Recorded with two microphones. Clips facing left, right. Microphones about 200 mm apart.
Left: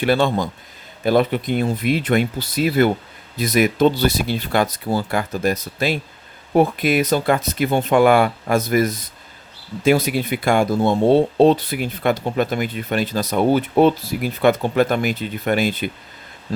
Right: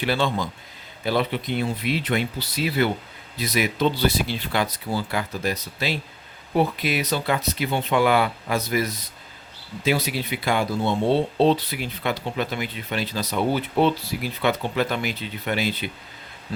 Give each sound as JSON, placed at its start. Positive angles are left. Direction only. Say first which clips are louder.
{"t": 0.0, "sound": "speech", "louder": "left 6 dB", "side_deg": 50}